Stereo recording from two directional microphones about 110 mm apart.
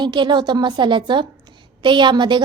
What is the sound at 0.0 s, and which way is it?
A woman's voice, 45° right (ahead or behind).